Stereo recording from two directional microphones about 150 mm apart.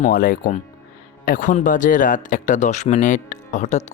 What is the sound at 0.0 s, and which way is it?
Speech, 70° left (ahead or behind).